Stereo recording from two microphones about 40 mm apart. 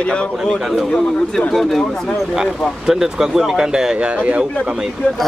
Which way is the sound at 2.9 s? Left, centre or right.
Centre.